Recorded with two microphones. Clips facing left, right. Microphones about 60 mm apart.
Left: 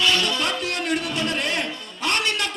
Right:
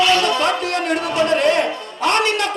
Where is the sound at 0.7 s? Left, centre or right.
Right.